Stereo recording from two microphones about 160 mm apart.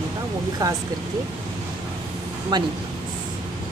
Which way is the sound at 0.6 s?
25° right (ahead or behind).